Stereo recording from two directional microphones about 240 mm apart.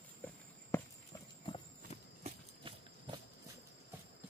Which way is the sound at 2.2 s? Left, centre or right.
Right.